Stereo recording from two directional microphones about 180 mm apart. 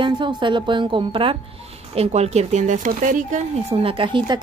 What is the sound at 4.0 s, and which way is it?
Speech, 25° right (ahead or behind).